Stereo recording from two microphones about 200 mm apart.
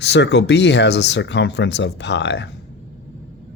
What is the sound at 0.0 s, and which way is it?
Speech, 60° left (ahead or behind).